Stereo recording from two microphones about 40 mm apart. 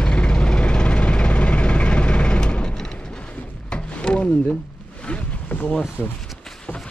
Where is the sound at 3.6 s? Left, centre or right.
Left.